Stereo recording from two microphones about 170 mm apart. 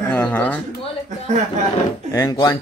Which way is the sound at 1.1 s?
45° right (ahead or behind).